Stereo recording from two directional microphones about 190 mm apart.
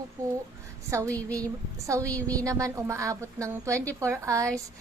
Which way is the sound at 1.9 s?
15° right (ahead or behind).